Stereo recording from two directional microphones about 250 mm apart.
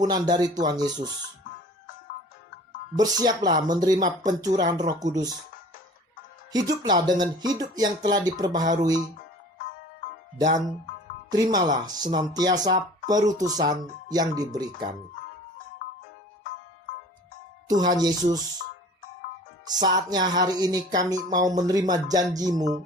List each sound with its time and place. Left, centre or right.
0.1 s speech: centre
2.9 s speech: centre
6.5 s speech: centre
11.3 s speech: centre
17.7 s speech: centre
19.6 s speech: centre